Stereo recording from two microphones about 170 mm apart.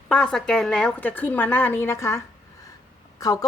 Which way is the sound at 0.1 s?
5° left (ahead or behind).